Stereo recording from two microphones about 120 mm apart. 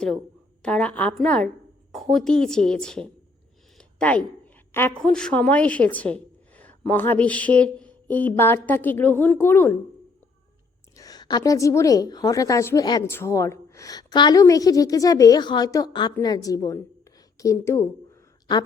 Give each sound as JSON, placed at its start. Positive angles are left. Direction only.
{"t": 0.6, "sound": "a woman's voice", "side_deg": 10}
{"t": 3.8, "sound": "a sound", "side_deg": 10}
{"t": 4.7, "sound": "a woman's voice", "side_deg": 20}
{"t": 4.9, "sound": "a woman's voice", "side_deg": 5}
{"t": 10.9, "sound": "a woman's voice", "side_deg": 30}